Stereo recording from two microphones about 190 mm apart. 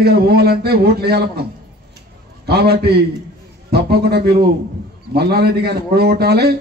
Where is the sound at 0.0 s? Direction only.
55° right (ahead or behind).